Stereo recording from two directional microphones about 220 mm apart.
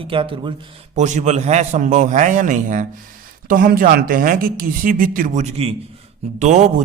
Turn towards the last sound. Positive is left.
turn(degrees=-30)  # may be behind; listen again after turning